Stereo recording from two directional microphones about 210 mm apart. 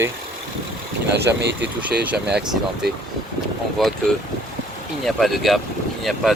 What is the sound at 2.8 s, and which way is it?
Speech, 50° right (ahead or behind).